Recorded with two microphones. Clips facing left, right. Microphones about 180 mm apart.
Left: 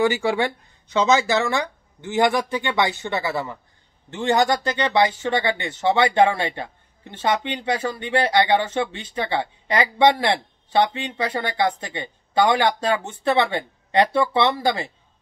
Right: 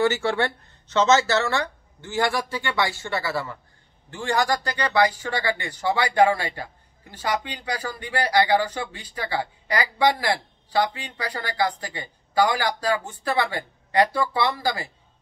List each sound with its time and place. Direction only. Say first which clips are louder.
0.0 s speech: left 2 dB; 15° left (ahead or behind)